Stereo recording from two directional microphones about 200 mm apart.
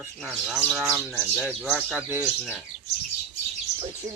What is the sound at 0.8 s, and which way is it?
Speech, 5° right (ahead or behind).